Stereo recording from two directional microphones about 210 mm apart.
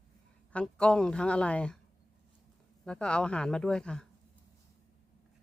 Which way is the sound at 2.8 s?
5° left (ahead or behind).